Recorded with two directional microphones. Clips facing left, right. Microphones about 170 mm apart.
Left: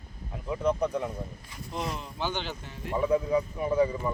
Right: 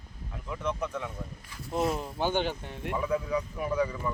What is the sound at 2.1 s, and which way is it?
Speech, 50° right (ahead or behind).